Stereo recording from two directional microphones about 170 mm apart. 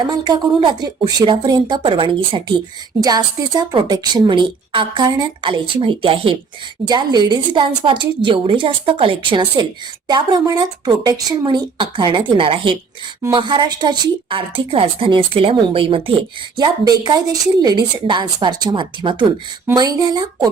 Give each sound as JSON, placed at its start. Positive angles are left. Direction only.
{"t": 0.1, "sound": "a woman's voice", "side_deg": -25}